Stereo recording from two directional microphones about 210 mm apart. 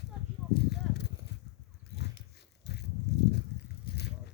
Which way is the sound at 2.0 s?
55° left (ahead or behind).